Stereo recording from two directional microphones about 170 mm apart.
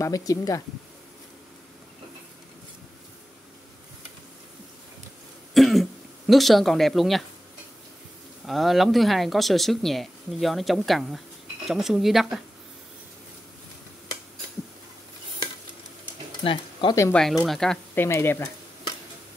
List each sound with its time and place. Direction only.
0.0 s speech: 20° left (ahead or behind)
5.5 s throat clearing: centre (ahead or behind)
8.5 s speech: centre (ahead or behind)
16.4 s speech: 35° left (ahead or behind)
17.1 s speech: centre (ahead or behind)
18.0 s speech: 15° left (ahead or behind)